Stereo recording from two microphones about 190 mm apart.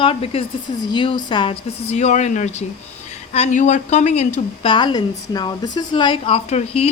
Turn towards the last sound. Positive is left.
turn(degrees=30)  # may be behind; listen again after turning